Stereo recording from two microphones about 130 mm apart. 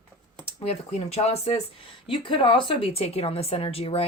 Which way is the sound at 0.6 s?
55° left (ahead or behind).